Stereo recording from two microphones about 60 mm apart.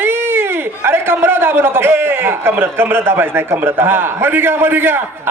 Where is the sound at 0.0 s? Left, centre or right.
Right.